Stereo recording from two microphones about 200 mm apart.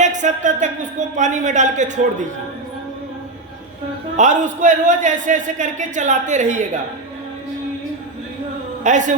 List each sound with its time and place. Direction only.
0.0 s a man's voice: 40° right (ahead or behind)
4.2 s a man's voice: 40° right (ahead or behind)
8.8 s a man's voice: 40° right (ahead or behind)